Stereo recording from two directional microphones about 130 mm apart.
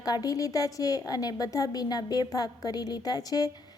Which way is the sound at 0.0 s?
30° left (ahead or behind).